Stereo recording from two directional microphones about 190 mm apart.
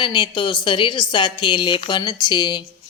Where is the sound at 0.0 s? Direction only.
25° left (ahead or behind).